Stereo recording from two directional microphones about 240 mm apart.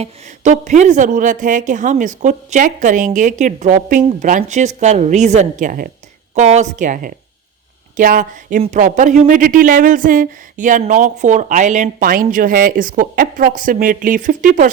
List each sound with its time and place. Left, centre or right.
0.0 s speech: right